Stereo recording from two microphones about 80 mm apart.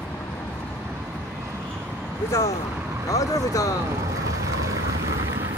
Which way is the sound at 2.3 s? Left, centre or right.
Left.